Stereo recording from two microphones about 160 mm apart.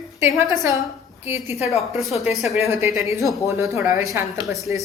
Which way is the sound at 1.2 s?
15° right (ahead or behind).